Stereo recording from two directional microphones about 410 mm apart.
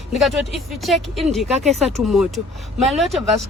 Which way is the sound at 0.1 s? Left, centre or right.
Centre.